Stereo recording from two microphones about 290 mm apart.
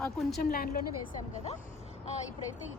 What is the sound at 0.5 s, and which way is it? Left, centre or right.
Speech, left.